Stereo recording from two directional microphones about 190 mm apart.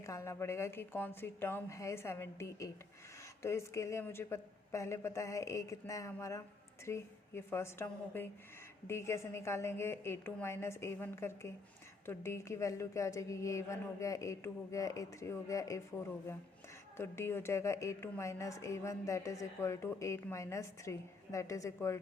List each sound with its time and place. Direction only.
0.0 s a woman's voice: 15° left (ahead or behind)
17.0 s a woman's voice: 10° left (ahead or behind)